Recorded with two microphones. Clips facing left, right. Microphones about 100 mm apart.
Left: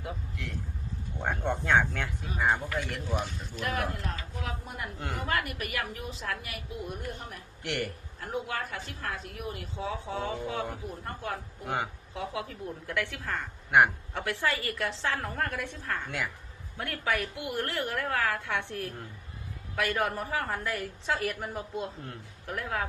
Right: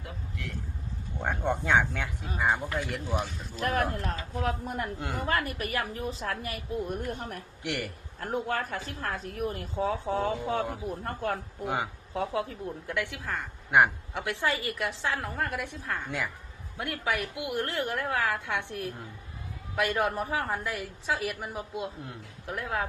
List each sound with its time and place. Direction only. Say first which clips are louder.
1.2 s a woman's voice: right 2 dB; 5° right (ahead or behind)
3.6 s a woman's voice: right 4 dB; 40° right (ahead or behind)
4.9 s a man's voice: right 2 dB; 5° right (ahead or behind)
5.2 s a woman's voice: right 2 dB; 35° right (ahead or behind)
7.6 s a man's voice: left 1 dB; 5° right (ahead or behind)
8.2 s a woman's voice: right 3 dB; 45° right (ahead or behind)
11.6 s a man's voice: right 1 dB; centre (ahead or behind)
12.1 s a woman's voice: right 6 dB; 35° right (ahead or behind)
12.9 s a woman's voice: even; 15° right (ahead or behind)
14.1 s a woman's voice: right 1 dB; 15° right (ahead or behind)
15.0 s a woman's voice: even; 5° right (ahead or behind)
20.7 s a woman's voice: even; 5° right (ahead or behind)
22.5 s a woman's voice: right 1 dB; 25° right (ahead or behind)